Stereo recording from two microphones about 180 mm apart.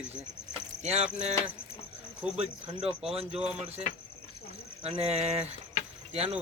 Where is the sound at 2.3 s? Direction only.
35° right (ahead or behind).